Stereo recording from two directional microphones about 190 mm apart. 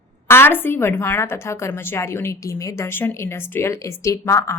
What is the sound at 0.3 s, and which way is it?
A woman's voice, 10° left (ahead or behind).